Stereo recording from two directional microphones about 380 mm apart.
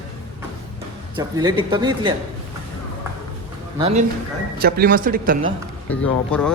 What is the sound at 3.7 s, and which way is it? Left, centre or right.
A man's voice, centre.